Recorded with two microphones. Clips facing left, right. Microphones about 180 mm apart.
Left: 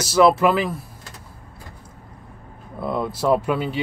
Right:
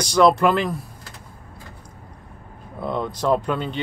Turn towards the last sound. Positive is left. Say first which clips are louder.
# left 2 dB
turn(degrees=5)  # may be behind; listen again after turning